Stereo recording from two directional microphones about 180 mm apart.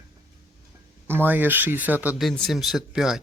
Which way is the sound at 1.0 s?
10° right (ahead or behind).